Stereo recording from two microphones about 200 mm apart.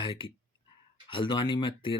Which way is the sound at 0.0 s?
25° left (ahead or behind).